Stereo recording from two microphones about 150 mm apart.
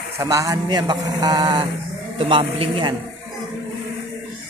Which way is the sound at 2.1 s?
40° right (ahead or behind).